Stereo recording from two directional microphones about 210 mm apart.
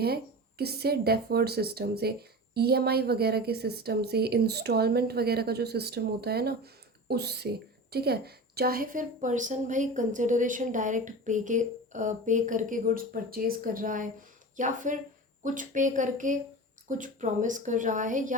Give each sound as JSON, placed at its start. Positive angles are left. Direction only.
{"t": 0.6, "sound": "a woman's voice", "side_deg": -50}